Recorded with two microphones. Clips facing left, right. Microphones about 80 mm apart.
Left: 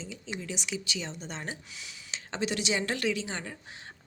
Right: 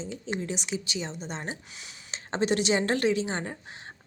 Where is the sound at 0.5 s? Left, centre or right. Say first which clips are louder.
Right 3 dB; right.